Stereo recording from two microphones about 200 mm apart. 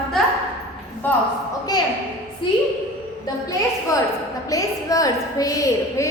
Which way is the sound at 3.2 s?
20° left (ahead or behind).